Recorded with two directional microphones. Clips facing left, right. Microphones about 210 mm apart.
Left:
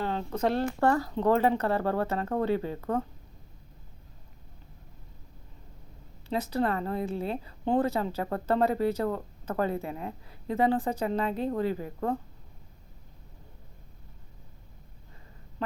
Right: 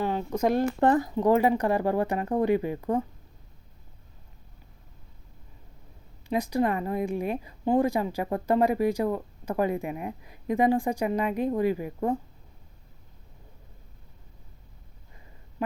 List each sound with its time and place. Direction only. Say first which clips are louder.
0.0 s a woman's voice: right 3 dB; 15° right (ahead or behind)
6.2 s a woman's voice: right 3 dB; 15° right (ahead or behind)